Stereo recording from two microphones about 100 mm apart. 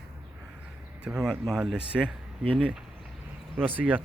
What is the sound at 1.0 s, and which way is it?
Speech, 5° right (ahead or behind).